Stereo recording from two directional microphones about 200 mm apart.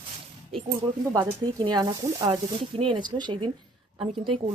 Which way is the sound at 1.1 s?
20° right (ahead or behind).